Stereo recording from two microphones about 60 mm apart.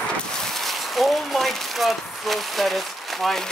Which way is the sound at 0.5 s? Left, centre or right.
Centre.